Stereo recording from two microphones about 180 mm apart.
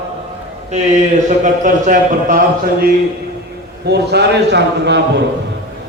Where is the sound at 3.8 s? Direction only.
65° right (ahead or behind).